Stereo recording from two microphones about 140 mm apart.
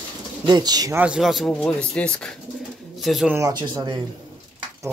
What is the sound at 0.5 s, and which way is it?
Speech, 30° right (ahead or behind).